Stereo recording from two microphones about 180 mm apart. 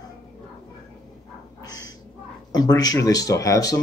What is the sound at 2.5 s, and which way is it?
Speech, 20° left (ahead or behind).